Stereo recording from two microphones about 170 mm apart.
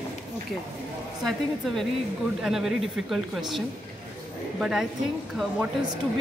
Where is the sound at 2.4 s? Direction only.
Centre (ahead or behind).